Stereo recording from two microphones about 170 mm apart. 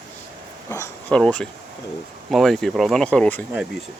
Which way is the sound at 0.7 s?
15° left (ahead or behind).